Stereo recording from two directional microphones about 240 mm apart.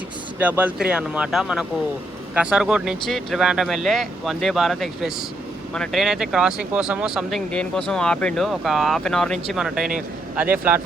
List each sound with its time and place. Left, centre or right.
0.3 s speech: centre